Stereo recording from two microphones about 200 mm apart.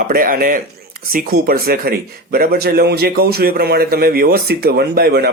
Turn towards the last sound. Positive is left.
turn(degrees=-50)  # may be behind; listen again after turning